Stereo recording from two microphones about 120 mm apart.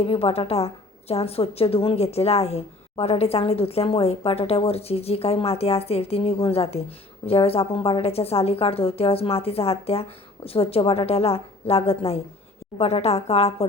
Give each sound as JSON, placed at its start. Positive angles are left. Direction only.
{"t": 0.0, "sound": "a woman's voice", "side_deg": 55}